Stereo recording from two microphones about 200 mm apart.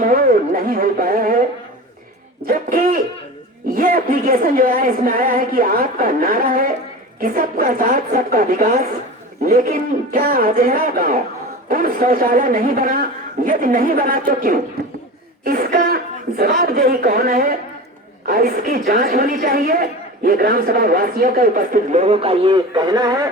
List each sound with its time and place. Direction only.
0.0 s speech: 45° right (ahead or behind)
2.5 s a woman's voice: 45° right (ahead or behind); by 23.2 s 20° right (ahead or behind)